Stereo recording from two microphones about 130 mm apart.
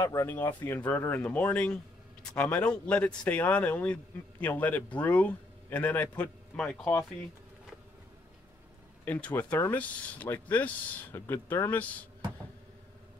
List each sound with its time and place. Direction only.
0.0 s a man's voice: 20° left (ahead or behind); by 6.9 s 5° left (ahead or behind)
9.0 s speech: 15° left (ahead or behind)